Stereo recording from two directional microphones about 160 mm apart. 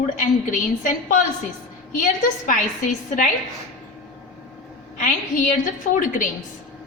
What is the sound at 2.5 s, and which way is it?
Speech, 55° left (ahead or behind).